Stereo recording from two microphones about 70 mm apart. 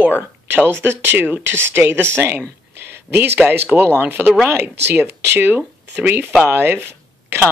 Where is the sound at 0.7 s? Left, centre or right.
Right.